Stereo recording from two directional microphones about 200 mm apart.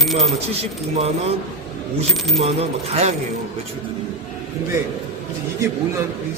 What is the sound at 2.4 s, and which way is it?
Speech, 30° right (ahead or behind).